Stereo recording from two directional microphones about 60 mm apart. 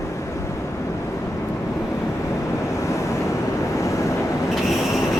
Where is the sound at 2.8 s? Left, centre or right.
Left.